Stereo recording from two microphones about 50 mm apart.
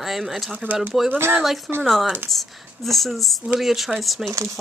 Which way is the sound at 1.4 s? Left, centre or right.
Centre.